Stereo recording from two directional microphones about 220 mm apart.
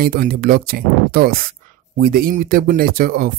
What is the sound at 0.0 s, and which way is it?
Speech, 40° right (ahead or behind).